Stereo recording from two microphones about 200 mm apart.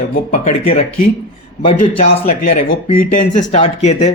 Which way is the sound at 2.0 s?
45° left (ahead or behind).